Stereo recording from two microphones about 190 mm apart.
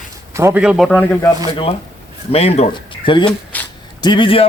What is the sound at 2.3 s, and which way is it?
Speech, 35° left (ahead or behind).